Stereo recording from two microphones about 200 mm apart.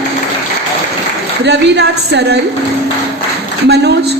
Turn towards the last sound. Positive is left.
turn(degrees=-55)  # may be behind; listen again after turning